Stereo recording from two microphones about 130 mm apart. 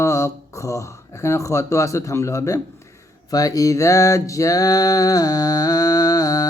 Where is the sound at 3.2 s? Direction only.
30° left (ahead or behind).